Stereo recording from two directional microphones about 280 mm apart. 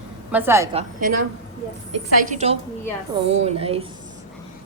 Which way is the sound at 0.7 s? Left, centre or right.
Right.